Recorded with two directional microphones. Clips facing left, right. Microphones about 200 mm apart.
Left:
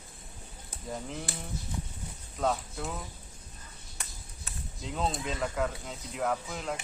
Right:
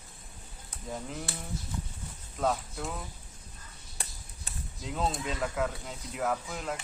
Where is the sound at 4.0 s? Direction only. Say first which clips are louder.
Right 3 dB; 30° right (ahead or behind).